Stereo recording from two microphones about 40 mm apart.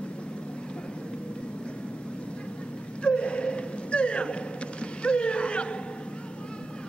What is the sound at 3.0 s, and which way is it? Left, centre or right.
Gasp, left.